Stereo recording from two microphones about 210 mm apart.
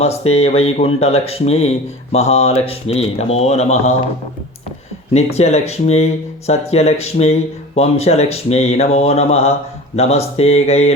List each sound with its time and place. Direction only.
0.0 s speech: 30° left (ahead or behind)
5.1 s speech: 30° left (ahead or behind)